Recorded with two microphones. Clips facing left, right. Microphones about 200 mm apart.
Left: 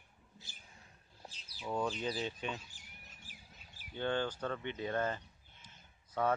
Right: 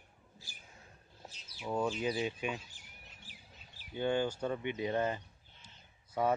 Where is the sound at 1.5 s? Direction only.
5° right (ahead or behind).